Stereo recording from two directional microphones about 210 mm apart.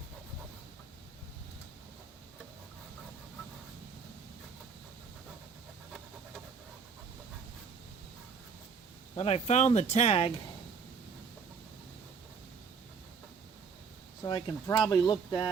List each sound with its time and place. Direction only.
9.1 s speech: 30° left (ahead or behind)
14.3 s speech: 20° left (ahead or behind)